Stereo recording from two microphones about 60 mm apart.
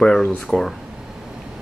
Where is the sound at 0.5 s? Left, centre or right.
Left.